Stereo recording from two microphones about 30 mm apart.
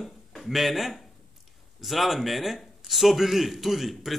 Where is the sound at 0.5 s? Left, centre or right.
Centre.